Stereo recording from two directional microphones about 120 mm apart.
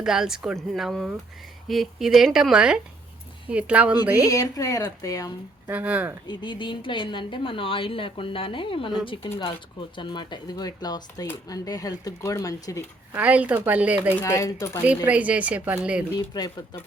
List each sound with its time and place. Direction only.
0.0 s a woman's voice: 5° right (ahead or behind)
4.3 s speech: 30° left (ahead or behind)
5.6 s a woman's voice: 10° right (ahead or behind)
6.2 s a woman's voice: 40° left (ahead or behind)
10.0 s speech: 40° left (ahead or behind)
13.1 s a woman's voice: 10° right (ahead or behind)
14.2 s speech: 25° left (ahead or behind)
14.8 s a woman's voice: 10° right (ahead or behind)